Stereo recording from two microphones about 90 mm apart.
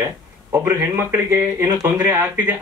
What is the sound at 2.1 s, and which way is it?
Speech, 20° right (ahead or behind).